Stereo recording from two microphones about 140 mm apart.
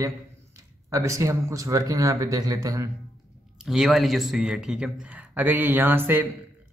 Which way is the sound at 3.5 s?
Centre (ahead or behind).